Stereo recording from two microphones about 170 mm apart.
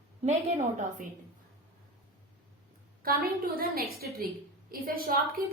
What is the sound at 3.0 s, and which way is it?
A woman's voice, 60° right (ahead or behind).